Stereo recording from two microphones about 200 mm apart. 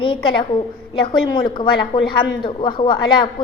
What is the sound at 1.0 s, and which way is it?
A woman's voice, 20° left (ahead or behind).